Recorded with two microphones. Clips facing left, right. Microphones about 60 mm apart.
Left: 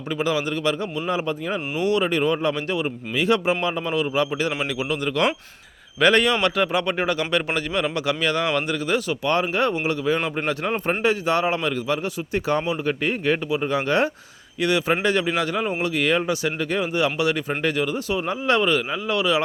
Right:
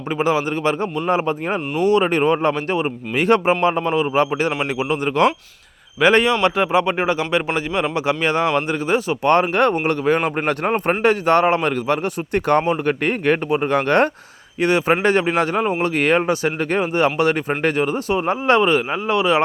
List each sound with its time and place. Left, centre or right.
0.1 s a man's voice: right
9.2 s a man's voice: right
14.6 s a man's voice: right